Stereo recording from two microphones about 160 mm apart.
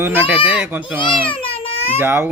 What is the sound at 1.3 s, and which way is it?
Babbling, 35° left (ahead or behind).